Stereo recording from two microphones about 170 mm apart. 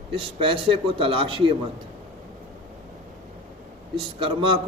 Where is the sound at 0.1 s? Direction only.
30° right (ahead or behind).